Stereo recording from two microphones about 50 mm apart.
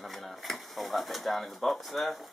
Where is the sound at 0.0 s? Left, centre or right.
Centre.